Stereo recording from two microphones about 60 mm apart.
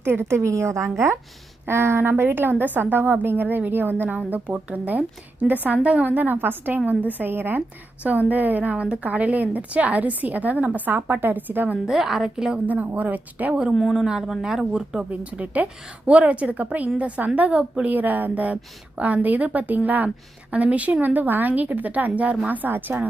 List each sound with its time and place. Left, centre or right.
0.0 s a woman's voice: right
0.9 s a woman's voice: right
4.3 s a woman's voice: right
11.9 s speech: centre
12.6 s a woman's voice: right
13.5 s speech: centre
15.1 s a woman's voice: right
17.9 s a woman's voice: right